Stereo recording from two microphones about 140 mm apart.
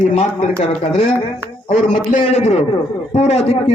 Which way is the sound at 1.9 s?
65° left (ahead or behind).